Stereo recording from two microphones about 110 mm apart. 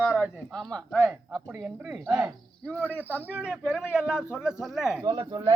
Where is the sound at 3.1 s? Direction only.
15° right (ahead or behind).